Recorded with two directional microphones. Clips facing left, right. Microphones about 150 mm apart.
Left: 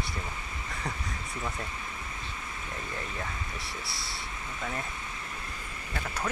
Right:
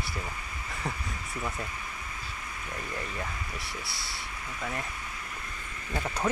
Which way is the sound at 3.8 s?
Centre (ahead or behind).